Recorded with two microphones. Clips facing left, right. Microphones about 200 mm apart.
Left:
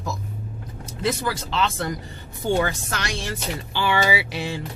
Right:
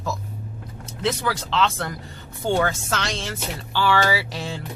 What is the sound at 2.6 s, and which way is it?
Speech, 70° right (ahead or behind).